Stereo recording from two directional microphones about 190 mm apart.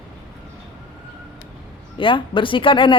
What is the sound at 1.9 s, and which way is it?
A woman's voice, 25° left (ahead or behind).